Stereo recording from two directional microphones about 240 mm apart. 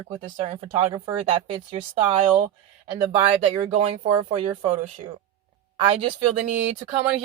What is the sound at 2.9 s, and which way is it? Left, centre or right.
Speech, right.